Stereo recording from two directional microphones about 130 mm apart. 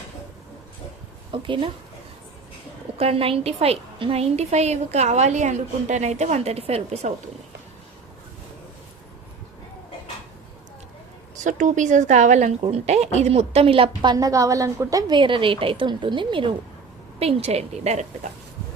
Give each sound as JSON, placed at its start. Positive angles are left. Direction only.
{"t": 1.3, "sound": "a woman's voice", "side_deg": -40}
{"t": 3.0, "sound": "a woman's voice", "side_deg": -50}
{"t": 11.3, "sound": "speech", "side_deg": -75}
{"t": 12.6, "sound": "a woman's voice", "side_deg": -55}
{"t": 17.2, "sound": "a woman's voice", "side_deg": -50}